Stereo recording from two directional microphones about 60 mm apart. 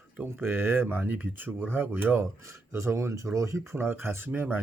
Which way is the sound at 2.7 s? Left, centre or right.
Right.